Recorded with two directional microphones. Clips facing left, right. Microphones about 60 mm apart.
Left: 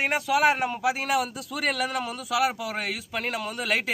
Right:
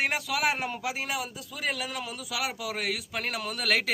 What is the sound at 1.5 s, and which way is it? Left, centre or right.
Speech, left.